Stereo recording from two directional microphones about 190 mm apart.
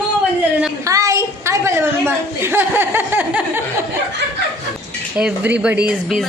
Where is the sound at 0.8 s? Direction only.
15° right (ahead or behind).